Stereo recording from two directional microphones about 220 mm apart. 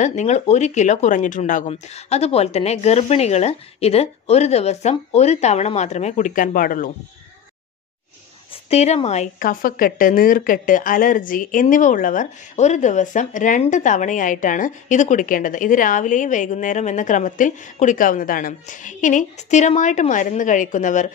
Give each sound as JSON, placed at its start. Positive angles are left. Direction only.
{"t": 0.0, "sound": "speech", "side_deg": 30}
{"t": 8.6, "sound": "speech", "side_deg": 30}